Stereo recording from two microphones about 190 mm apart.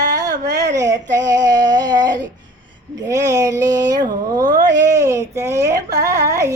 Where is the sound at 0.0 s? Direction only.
20° right (ahead or behind).